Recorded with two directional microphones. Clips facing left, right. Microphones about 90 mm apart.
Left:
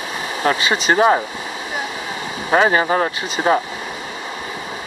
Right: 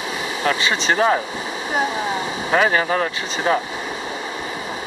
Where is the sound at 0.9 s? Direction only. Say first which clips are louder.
Left 4 dB; 20° left (ahead or behind).